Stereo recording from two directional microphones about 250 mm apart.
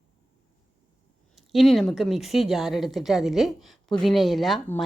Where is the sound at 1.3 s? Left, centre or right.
Centre.